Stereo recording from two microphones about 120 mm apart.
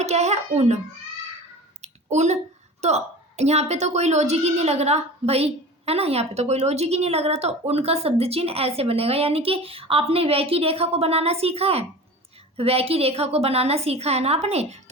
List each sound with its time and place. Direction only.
0.0 s a woman's voice: 65° right (ahead or behind)
1.8 s a sound: 70° right (ahead or behind)
2.8 s a woman's voice: 65° right (ahead or behind)